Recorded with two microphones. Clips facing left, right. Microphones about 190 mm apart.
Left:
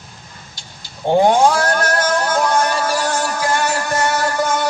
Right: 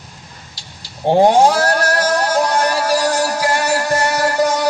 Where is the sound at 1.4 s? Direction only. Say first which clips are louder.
Right 1 dB; 35° right (ahead or behind).